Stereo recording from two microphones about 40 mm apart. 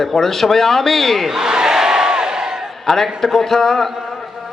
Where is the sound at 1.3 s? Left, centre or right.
Centre.